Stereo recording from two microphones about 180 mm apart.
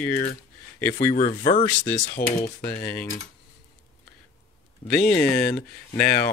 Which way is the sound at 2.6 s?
10° left (ahead or behind).